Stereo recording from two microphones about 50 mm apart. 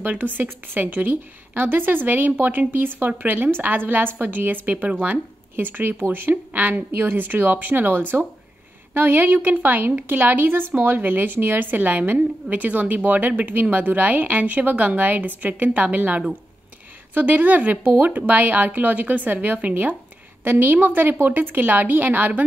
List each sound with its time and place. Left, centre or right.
0.1 s a woman's voice: right